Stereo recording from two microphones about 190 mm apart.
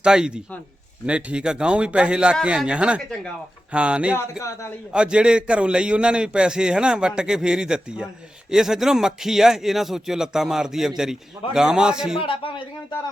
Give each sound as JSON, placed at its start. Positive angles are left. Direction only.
{"t": 0.0, "sound": "a man's voice", "side_deg": -5}
{"t": 4.2, "sound": "speech", "side_deg": 15}
{"t": 4.9, "sound": "a man's voice", "side_deg": -5}
{"t": 12.2, "sound": "speech", "side_deg": 30}